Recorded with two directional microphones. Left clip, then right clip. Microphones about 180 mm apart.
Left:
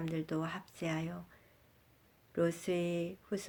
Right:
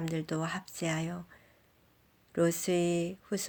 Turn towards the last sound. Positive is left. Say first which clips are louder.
# right 4 dB
turn(degrees=-40)  # may be behind; listen again after turning